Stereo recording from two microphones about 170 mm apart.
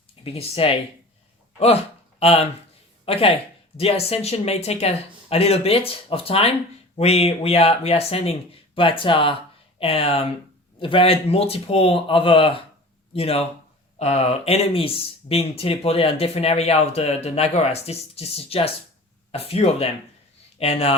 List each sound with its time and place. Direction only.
0.3 s speech: 35° left (ahead or behind)